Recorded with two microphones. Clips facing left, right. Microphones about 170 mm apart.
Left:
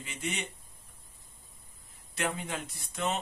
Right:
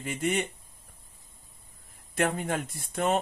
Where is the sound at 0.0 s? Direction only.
50° right (ahead or behind).